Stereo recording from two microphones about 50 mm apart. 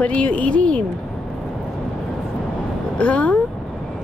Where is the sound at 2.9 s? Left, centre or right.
Left.